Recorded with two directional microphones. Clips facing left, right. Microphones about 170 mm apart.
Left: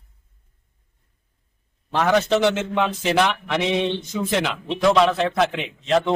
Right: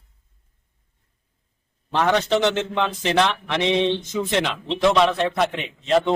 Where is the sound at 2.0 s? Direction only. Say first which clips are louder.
Left 1 dB; centre (ahead or behind).